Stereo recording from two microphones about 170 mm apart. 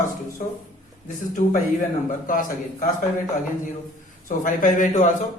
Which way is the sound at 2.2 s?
55° left (ahead or behind).